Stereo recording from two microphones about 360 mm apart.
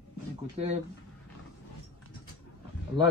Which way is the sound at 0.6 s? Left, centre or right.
Centre.